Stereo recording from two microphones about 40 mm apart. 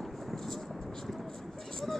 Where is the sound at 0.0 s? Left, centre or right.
Centre.